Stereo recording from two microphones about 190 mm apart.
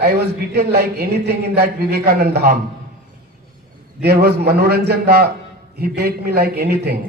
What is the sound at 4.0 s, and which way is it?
A man's voice, 55° right (ahead or behind).